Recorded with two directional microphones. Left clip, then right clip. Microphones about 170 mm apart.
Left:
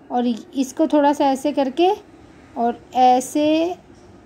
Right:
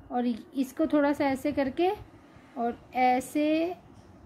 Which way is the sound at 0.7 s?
10° left (ahead or behind).